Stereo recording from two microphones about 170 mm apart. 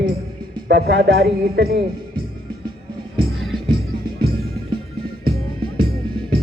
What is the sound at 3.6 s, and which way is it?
Music, 25° right (ahead or behind).